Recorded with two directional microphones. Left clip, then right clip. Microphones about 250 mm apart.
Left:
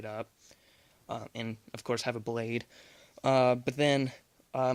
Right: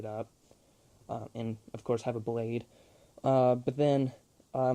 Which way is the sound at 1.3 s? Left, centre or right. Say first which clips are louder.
Even; centre.